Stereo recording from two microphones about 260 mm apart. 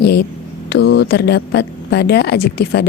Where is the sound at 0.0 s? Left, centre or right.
Left.